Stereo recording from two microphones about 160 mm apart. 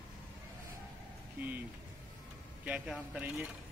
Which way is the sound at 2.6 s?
5° right (ahead or behind).